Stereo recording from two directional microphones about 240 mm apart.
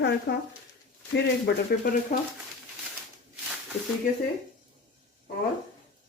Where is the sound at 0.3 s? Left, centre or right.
Left.